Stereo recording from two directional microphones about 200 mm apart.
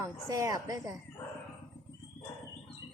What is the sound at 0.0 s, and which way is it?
Speech, 15° right (ahead or behind).